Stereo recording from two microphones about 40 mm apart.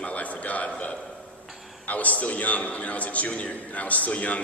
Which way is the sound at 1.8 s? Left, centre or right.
Left.